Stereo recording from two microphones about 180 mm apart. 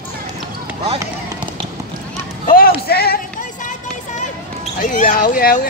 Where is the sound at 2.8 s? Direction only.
60° left (ahead or behind).